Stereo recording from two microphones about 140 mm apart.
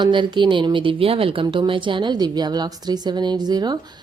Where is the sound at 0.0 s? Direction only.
35° right (ahead or behind).